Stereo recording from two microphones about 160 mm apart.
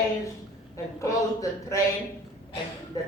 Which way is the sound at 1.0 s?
20° left (ahead or behind).